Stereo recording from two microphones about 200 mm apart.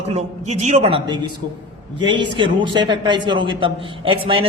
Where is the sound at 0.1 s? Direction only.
35° right (ahead or behind).